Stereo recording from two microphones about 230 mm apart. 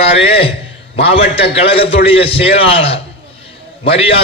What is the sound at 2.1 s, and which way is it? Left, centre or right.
A man's voice, left.